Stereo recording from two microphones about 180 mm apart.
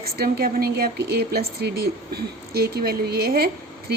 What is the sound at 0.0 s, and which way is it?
Speech, 55° right (ahead or behind).